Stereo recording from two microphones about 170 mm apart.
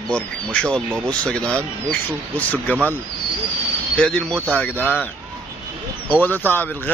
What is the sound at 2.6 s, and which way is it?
Speech, 10° left (ahead or behind).